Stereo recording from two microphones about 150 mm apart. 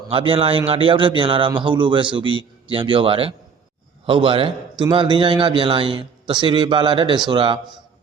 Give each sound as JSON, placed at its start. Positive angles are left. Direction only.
{"t": 0.1, "sound": "a man's voice", "side_deg": -35}